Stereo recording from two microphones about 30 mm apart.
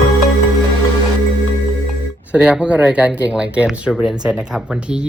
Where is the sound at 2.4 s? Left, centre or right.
Right.